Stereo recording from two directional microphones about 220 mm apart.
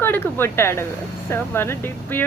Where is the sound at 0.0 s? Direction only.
10° left (ahead or behind).